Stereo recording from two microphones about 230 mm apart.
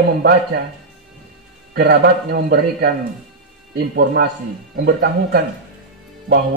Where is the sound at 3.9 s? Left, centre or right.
Right.